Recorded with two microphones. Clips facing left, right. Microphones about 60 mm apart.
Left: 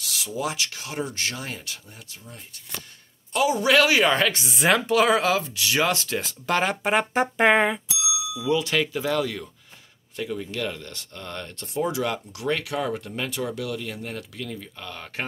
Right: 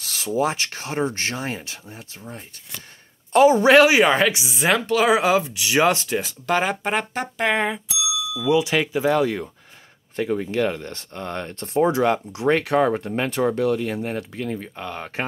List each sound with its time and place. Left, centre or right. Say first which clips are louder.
0.0 s speech: right 7 dB; right
6.1 s speech: right 3 dB; centre
7.2 s speech: left 3 dB; centre
8.5 s speech: right 4 dB; centre